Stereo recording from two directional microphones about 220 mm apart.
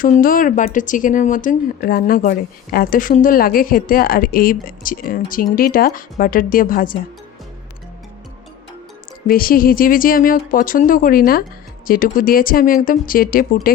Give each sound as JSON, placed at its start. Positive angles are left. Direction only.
{"t": 0.2, "sound": "speech", "side_deg": 40}
{"t": 9.2, "sound": "speech", "side_deg": 40}